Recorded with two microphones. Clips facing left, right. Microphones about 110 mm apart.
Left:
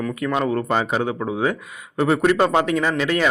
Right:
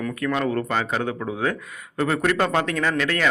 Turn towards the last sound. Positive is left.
turn(degrees=15)  # may be behind; listen again after turning